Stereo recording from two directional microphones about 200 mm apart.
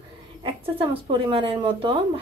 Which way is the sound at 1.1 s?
25° right (ahead or behind).